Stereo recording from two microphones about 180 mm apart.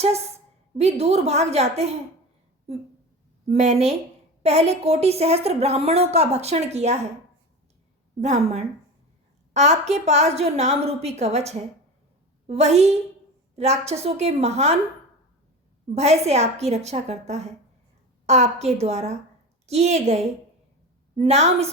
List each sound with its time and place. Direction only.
0.8 s a woman's voice: 35° right (ahead or behind)
3.4 s a woman's voice: 40° right (ahead or behind)
8.2 s a woman's voice: 40° right (ahead or behind)
16.0 s a woman's voice: 35° right (ahead or behind)